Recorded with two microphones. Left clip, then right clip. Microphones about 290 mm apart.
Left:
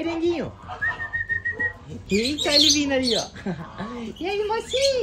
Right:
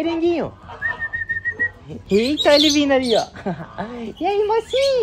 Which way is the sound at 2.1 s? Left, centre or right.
Right.